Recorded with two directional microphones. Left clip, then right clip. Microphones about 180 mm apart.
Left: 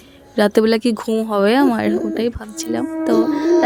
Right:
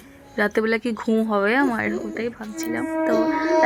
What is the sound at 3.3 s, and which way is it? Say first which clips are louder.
Music: left 3 dB; 30° left (ahead or behind).